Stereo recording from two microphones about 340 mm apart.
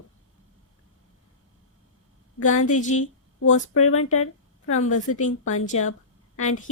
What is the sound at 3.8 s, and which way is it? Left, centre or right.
A woman's voice, left.